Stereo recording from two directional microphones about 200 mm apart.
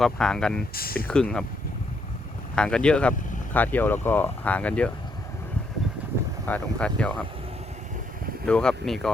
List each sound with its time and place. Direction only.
0.0 s speech: 5° left (ahead or behind)
0.7 s speech: 50° left (ahead or behind)
1.0 s speech: 5° left (ahead or behind)
2.6 s speech: 5° left (ahead or behind)
6.4 s speech: 5° left (ahead or behind)
8.4 s speech: 5° left (ahead or behind)